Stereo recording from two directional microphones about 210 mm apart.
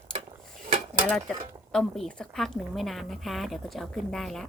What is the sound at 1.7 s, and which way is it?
A woman's voice, centre (ahead or behind).